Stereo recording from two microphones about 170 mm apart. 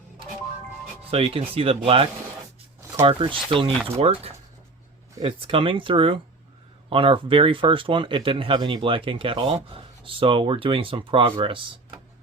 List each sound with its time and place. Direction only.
1.1 s speech: 35° right (ahead or behind)